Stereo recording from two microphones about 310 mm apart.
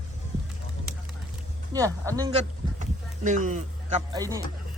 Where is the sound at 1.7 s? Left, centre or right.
Centre.